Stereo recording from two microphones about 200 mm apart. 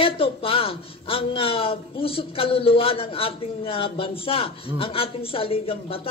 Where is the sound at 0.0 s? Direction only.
25° left (ahead or behind).